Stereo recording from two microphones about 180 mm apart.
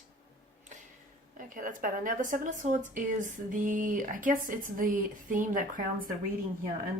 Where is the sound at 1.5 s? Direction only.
50° right (ahead or behind).